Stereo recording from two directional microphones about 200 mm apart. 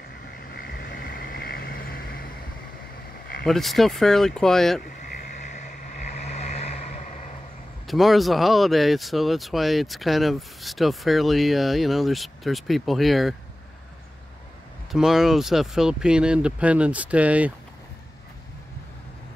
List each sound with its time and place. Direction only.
0.5 s vehicle: 50° left (ahead or behind)
3.4 s speech: centre (ahead or behind)
4.8 s vehicle: 40° left (ahead or behind)
7.8 s speech: centre (ahead or behind)
14.9 s speech: centre (ahead or behind)